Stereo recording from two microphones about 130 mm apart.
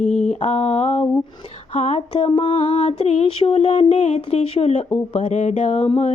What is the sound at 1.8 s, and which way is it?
Mantra, 60° left (ahead or behind).